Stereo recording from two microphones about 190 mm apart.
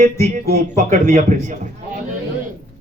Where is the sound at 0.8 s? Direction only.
40° right (ahead or behind).